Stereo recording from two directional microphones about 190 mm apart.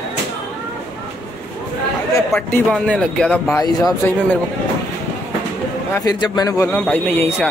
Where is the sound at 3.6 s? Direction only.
20° left (ahead or behind).